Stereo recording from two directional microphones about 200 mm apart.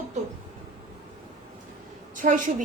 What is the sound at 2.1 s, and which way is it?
Speech, 40° right (ahead or behind).